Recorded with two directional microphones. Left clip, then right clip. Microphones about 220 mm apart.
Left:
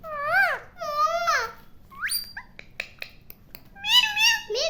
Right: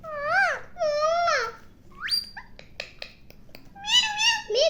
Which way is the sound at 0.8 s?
45° left (ahead or behind).